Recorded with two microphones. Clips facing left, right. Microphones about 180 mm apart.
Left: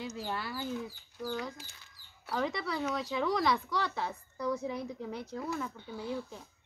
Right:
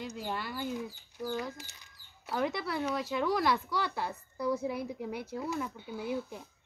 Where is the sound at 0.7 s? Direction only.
10° right (ahead or behind).